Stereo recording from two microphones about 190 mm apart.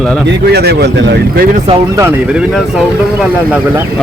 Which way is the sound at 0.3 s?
60° right (ahead or behind).